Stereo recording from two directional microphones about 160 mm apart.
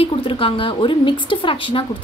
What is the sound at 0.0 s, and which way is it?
A woman's voice, 35° left (ahead or behind).